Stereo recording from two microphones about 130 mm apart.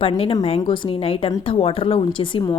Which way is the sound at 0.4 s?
45° left (ahead or behind).